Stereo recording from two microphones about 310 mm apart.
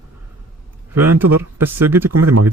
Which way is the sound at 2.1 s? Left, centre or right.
Right.